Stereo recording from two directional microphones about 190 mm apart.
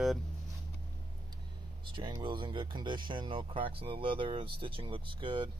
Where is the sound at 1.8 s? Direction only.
25° right (ahead or behind).